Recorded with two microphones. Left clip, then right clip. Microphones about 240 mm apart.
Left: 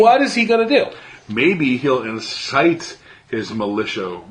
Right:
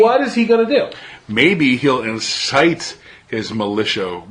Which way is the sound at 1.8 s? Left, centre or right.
Right.